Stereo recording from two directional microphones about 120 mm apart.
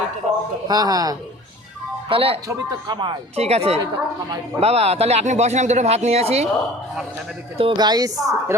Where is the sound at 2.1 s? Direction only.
50° right (ahead or behind).